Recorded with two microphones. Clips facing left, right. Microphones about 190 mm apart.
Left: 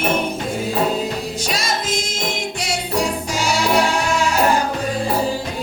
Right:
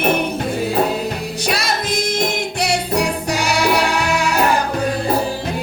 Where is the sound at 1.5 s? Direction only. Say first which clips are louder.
Right 3 dB; 65° right (ahead or behind).